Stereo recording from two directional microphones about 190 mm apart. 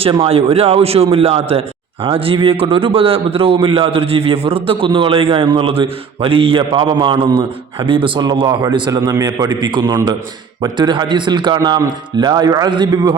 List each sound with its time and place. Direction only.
0.0 s a man's voice: 30° right (ahead or behind)